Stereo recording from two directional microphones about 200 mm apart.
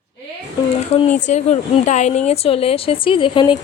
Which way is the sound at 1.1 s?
35° left (ahead or behind).